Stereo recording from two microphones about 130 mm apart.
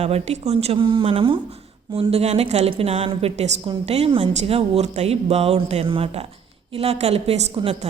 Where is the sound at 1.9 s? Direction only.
55° right (ahead or behind).